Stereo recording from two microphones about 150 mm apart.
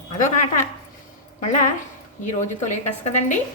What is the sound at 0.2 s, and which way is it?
A woman's voice, 60° left (ahead or behind).